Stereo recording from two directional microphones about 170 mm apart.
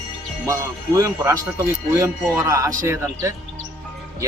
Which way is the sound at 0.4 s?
20° right (ahead or behind).